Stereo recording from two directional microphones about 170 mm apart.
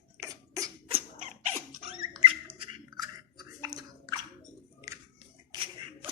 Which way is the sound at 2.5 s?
25° right (ahead or behind).